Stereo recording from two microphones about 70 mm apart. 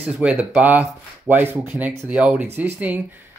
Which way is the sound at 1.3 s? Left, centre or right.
Right.